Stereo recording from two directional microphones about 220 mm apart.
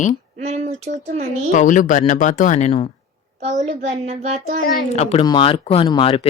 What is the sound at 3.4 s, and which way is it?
Speech, 35° right (ahead or behind).